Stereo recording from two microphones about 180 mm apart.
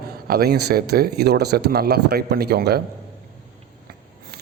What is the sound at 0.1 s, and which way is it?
A man's voice, 55° right (ahead or behind).